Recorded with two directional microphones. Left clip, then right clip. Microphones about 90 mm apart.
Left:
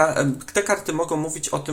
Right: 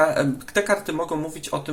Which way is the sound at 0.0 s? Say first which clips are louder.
Even; 25° left (ahead or behind).